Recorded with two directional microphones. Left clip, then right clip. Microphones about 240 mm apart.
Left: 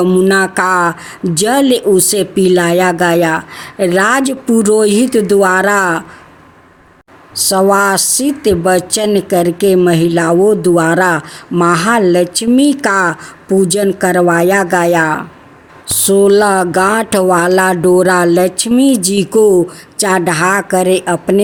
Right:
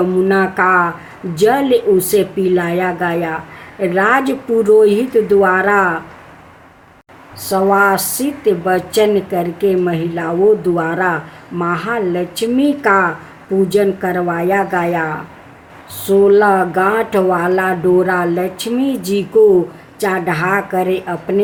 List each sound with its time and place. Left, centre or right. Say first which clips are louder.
0.2 s speech: left 2 dB; left
7.4 s speech: left 2 dB; left